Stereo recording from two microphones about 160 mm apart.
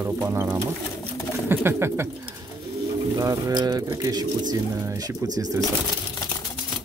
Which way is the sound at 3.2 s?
20° right (ahead or behind).